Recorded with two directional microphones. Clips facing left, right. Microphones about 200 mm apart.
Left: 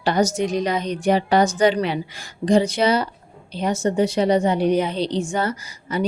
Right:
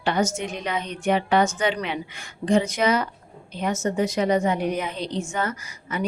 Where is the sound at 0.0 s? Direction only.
35° left (ahead or behind).